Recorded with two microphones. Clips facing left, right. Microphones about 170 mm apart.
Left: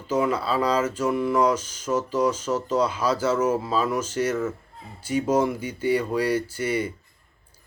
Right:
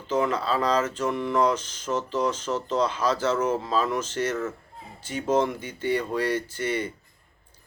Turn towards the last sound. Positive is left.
turn(degrees=10)  # may be behind; listen again after turning